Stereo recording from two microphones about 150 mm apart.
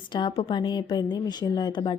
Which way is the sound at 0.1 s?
30° left (ahead or behind).